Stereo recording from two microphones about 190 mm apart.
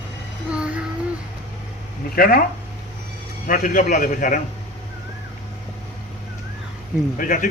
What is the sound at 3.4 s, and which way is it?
Speech, 45° left (ahead or behind).